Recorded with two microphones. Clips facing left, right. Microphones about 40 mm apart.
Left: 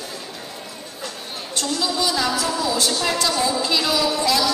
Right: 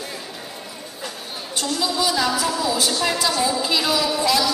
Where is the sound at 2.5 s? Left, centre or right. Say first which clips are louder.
Even; centre.